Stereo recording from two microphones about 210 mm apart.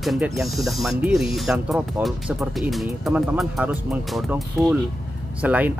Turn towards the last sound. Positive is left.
turn(degrees=-5)  # may be behind; listen again after turning